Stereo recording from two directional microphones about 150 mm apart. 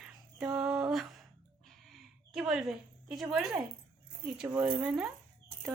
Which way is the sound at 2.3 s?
Centre (ahead or behind).